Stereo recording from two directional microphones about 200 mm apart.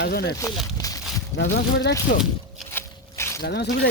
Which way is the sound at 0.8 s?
15° left (ahead or behind).